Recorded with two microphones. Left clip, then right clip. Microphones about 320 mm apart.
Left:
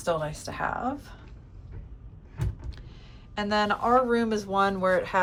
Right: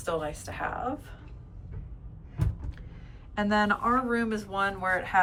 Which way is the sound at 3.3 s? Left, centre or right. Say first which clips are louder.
Even; centre.